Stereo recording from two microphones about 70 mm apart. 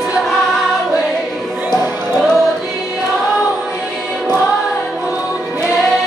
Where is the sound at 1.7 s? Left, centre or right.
Centre.